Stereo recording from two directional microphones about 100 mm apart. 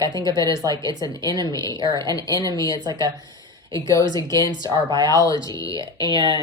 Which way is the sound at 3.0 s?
40° right (ahead or behind).